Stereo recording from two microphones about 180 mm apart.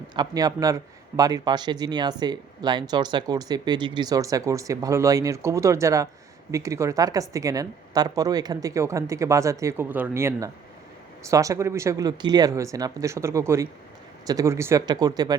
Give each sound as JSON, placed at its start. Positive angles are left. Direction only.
{"t": 0.2, "sound": "a woman's voice", "side_deg": -20}